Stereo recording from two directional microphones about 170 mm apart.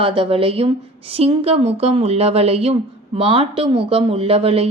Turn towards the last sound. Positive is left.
turn(degrees=-35)  # may be behind; listen again after turning